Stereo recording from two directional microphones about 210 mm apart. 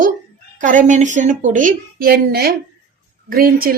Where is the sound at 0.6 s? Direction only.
40° right (ahead or behind).